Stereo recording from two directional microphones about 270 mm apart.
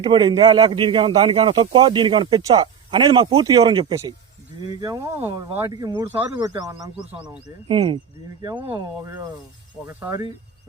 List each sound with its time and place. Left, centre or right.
0.0 s a man's voice: centre
7.7 s a man's voice: centre